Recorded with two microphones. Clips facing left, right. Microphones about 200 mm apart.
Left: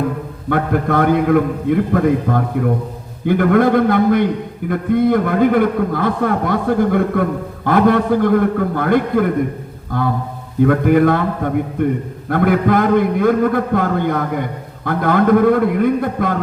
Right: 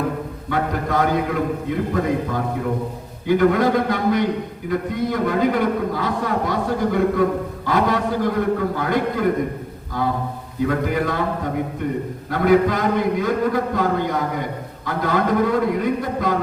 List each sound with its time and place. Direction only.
0.5 s a man's voice: 55° left (ahead or behind)